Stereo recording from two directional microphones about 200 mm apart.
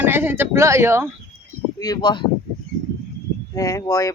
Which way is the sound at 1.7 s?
20° left (ahead or behind).